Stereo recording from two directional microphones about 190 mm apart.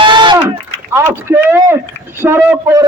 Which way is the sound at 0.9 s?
10° right (ahead or behind).